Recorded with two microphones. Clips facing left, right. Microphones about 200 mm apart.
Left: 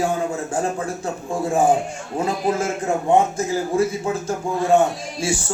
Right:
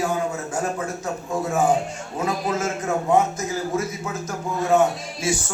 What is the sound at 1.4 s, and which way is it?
A man's voice, 30° left (ahead or behind).